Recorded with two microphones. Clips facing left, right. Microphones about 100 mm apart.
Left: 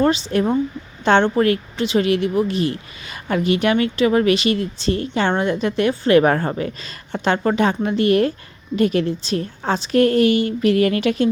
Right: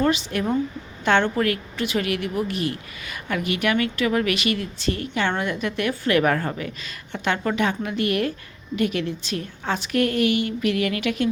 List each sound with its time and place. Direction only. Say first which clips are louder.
0.0 s a woman's voice: left 5 dB; 30° left (ahead or behind)